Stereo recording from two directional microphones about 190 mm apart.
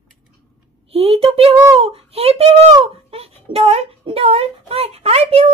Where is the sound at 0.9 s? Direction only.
30° right (ahead or behind).